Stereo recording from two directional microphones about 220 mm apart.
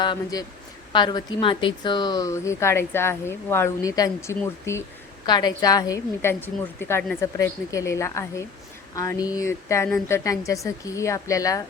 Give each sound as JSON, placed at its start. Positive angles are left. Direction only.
{"t": 0.0, "sound": "a woman's voice", "side_deg": 20}